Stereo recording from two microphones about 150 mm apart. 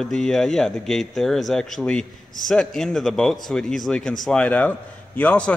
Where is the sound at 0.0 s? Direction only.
5° left (ahead or behind).